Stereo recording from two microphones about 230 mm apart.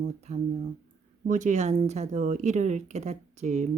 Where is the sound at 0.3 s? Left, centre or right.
Right.